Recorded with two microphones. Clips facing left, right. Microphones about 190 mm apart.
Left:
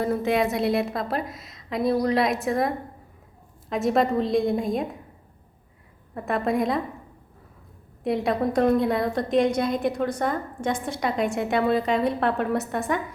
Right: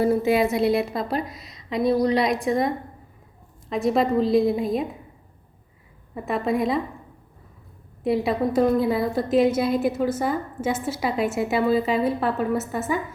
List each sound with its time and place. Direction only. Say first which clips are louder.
0.0 s a woman's voice: right 3 dB; 5° right (ahead or behind)
6.1 s a woman's voice: even; centre (ahead or behind)
8.0 s a woman's voice: right 2 dB; centre (ahead or behind)